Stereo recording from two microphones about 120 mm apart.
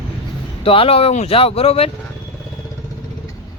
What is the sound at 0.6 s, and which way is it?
Speech, 50° left (ahead or behind).